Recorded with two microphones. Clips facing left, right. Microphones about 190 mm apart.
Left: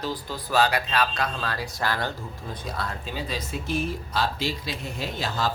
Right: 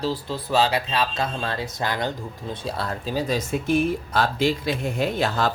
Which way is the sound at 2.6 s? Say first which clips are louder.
Right 4 dB; 35° right (ahead or behind).